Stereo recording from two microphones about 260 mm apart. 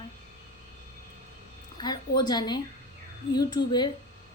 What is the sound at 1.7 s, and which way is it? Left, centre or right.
A woman's voice, centre.